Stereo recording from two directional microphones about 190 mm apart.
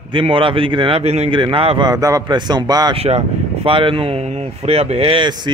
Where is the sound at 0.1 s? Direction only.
25° right (ahead or behind).